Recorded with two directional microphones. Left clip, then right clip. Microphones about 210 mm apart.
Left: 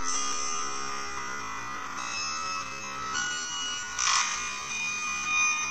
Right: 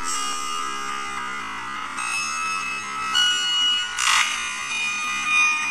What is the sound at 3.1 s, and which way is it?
Fire alarm, 50° right (ahead or behind).